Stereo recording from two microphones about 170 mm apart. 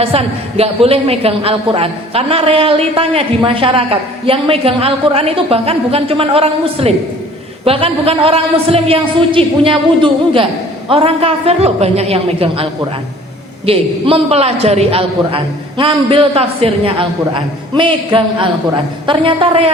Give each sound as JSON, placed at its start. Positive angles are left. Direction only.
{"t": 0.0, "sound": "a woman's voice", "side_deg": -35}
{"t": 13.7, "sound": "a woman's voice", "side_deg": -35}